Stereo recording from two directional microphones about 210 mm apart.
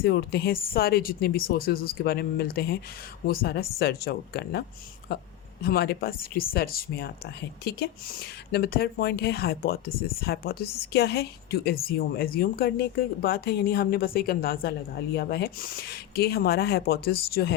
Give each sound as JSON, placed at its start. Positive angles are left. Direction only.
{"t": 0.0, "sound": "speech", "side_deg": 50}
{"t": 5.6, "sound": "speech", "side_deg": 50}